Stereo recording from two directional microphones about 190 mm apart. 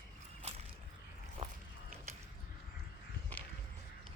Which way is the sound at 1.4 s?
30° right (ahead or behind).